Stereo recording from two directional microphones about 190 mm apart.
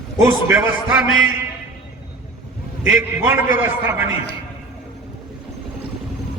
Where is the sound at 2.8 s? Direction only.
10° right (ahead or behind).